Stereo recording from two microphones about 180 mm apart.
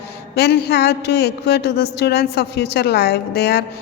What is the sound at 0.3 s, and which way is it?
A woman's voice, 65° left (ahead or behind).